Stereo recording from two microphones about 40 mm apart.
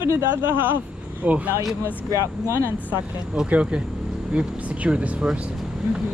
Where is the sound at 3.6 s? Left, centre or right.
Right.